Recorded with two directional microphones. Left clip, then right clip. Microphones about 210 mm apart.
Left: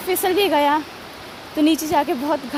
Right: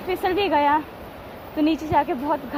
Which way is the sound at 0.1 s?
60° left (ahead or behind).